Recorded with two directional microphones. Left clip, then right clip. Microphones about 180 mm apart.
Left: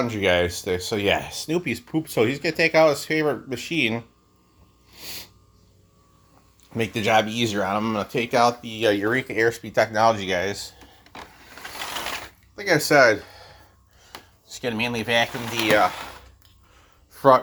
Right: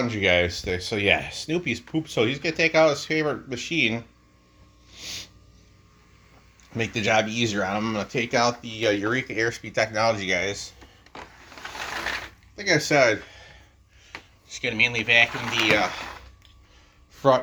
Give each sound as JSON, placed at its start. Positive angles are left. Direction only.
{"t": 0.0, "sound": "speech", "side_deg": 20}
{"t": 4.9, "sound": "a sound", "side_deg": 25}
{"t": 6.7, "sound": "speech", "side_deg": 25}
{"t": 12.5, "sound": "speech", "side_deg": 20}
{"t": 14.1, "sound": "speech", "side_deg": 45}
{"t": 17.2, "sound": "speech", "side_deg": 25}